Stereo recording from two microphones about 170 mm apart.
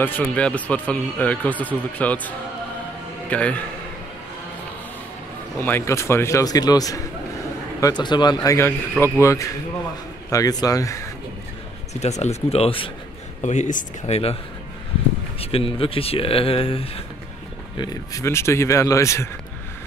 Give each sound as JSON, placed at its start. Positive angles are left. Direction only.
{"t": 0.0, "sound": "speech", "side_deg": 10}
{"t": 5.6, "sound": "speech", "side_deg": 15}
{"t": 11.9, "sound": "speech", "side_deg": 40}
{"t": 13.4, "sound": "speech", "side_deg": 45}
{"t": 15.4, "sound": "speech", "side_deg": 35}
{"t": 17.7, "sound": "speech", "side_deg": 20}